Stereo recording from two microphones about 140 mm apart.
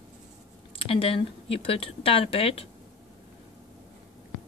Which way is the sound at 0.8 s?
40° left (ahead or behind).